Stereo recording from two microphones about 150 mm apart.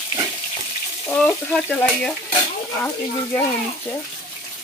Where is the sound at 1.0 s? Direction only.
5° left (ahead or behind).